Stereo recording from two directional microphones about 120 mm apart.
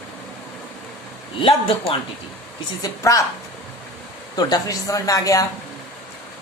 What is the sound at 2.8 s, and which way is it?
Speech, 25° left (ahead or behind).